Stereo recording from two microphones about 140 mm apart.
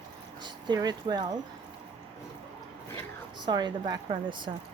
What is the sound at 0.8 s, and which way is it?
Speech, 30° right (ahead or behind).